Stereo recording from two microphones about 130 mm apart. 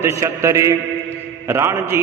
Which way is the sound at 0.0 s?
25° right (ahead or behind).